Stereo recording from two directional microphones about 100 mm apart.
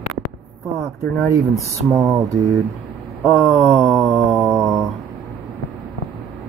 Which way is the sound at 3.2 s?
25° right (ahead or behind).